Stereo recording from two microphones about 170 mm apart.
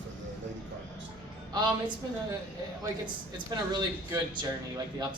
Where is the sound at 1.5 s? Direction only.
25° right (ahead or behind).